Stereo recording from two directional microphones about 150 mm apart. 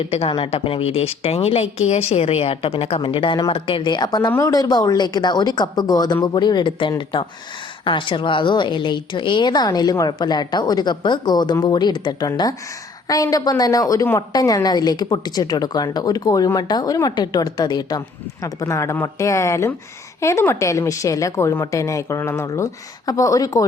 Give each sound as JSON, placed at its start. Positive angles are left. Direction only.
{"t": 0.0, "sound": "a woman's voice", "side_deg": 40}